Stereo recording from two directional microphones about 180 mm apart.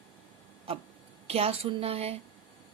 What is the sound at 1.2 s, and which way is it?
Speech, 35° right (ahead or behind).